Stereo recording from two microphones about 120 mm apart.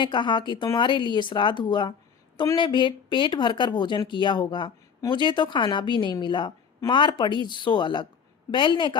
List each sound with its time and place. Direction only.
0.0 s speech: 40° left (ahead or behind)